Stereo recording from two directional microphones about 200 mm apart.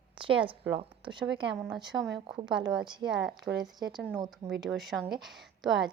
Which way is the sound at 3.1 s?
5° right (ahead or behind).